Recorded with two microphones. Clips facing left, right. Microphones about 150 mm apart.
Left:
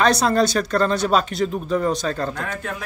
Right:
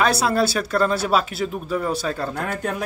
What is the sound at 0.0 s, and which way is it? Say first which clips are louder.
Speech: left 2 dB; 5° right (ahead or behind).